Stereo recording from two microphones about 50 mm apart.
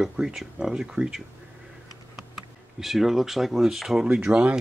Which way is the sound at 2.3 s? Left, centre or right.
Centre.